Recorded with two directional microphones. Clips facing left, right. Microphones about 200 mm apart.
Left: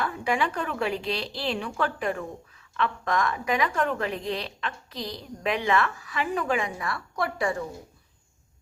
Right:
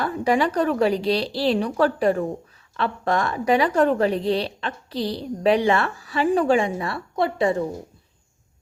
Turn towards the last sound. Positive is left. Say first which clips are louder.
# right 7 dB
turn(degrees=-25)  # may be behind; listen again after turning